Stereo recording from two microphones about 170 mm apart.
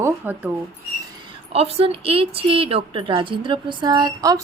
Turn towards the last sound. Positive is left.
turn(degrees=-20)  # may be behind; listen again after turning